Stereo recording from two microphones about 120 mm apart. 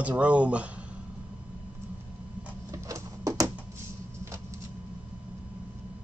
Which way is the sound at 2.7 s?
25° right (ahead or behind).